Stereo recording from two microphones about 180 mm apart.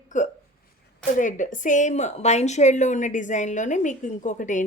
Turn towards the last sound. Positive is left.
turn(degrees=45)  # may be behind; listen again after turning